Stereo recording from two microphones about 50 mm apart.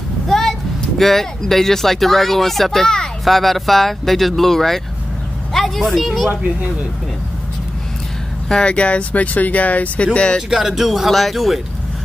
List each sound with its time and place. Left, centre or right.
0.3 s speech: centre
8.5 s speech: centre
10.5 s speech: centre